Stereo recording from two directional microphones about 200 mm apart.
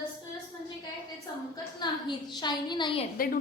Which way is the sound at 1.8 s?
20° left (ahead or behind).